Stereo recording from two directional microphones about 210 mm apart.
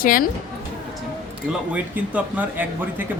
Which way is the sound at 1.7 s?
5° right (ahead or behind).